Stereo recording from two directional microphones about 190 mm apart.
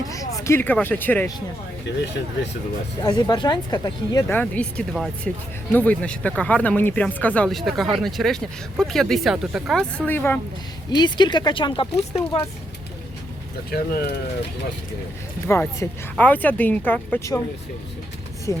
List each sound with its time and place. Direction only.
0.1 s speech: 15° left (ahead or behind)
3.0 s speech: 20° left (ahead or behind)
4.4 s speech: 5° left (ahead or behind)
10.1 s speech: 10° left (ahead or behind)
10.9 s speech: 25° left (ahead or behind)
13.7 s speech: 55° left (ahead or behind)
15.4 s speech: 15° left (ahead or behind)
18.5 s speech: 15° left (ahead or behind)